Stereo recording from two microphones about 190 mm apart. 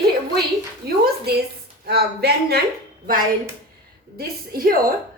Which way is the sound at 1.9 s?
55° right (ahead or behind).